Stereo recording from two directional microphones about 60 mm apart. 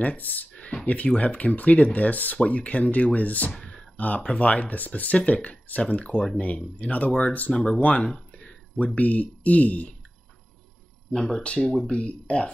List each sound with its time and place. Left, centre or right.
0.0 s speech: left
0.5 s a sound: left
0.8 s speech: left
7.5 s speech: centre
7.8 s speech: left
11.1 s speech: centre